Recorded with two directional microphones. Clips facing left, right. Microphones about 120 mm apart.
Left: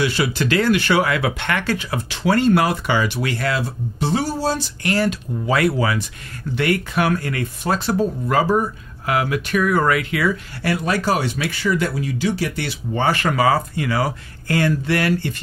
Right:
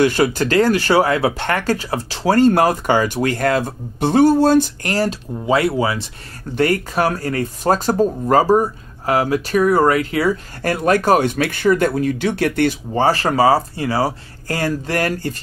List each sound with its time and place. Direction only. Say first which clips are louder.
0.0 s speech: right 5 dB; 45° right (ahead or behind)
5.5 s speech: right 2 dB; 25° right (ahead or behind)
6.5 s speech: right 3 dB; 40° right (ahead or behind); by 12.7 s 55° right (ahead or behind)
12.9 s speech: even; 35° right (ahead or behind)